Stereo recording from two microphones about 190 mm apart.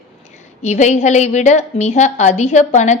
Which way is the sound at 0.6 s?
35° left (ahead or behind).